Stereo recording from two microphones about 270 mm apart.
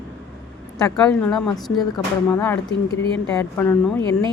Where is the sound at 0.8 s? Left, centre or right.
Centre.